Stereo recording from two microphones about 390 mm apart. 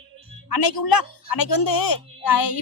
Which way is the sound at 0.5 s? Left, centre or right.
Left.